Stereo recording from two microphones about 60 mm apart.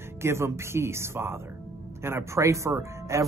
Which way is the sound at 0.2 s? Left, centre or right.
Right.